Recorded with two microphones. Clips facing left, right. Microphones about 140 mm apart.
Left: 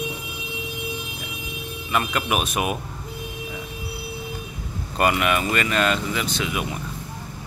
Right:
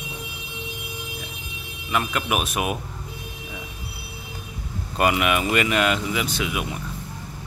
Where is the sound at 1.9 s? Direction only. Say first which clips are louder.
Left 1 dB; centre (ahead or behind).